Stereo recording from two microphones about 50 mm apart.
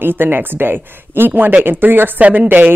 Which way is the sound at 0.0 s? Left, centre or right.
Right.